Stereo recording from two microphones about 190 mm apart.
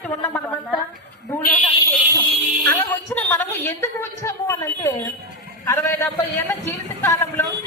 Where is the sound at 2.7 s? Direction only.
10° left (ahead or behind).